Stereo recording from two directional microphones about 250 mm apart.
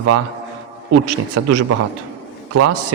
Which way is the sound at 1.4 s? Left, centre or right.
Right.